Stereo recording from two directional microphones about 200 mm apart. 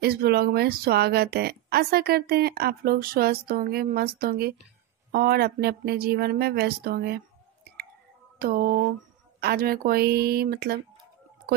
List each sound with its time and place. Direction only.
0.0 s speech: 50° right (ahead or behind)
8.4 s speech: 45° right (ahead or behind)